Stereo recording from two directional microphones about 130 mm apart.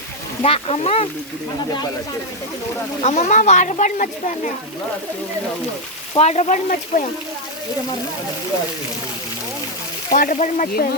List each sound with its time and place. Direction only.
0.4 s speech: 50° left (ahead or behind)
3.0 s speech: 60° left (ahead or behind); by 4.1 s 80° left
6.1 s speech: 55° left (ahead or behind); by 7.1 s 80° left
10.1 s speech: 85° left